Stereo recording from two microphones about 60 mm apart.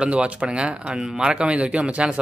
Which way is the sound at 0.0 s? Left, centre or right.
Centre.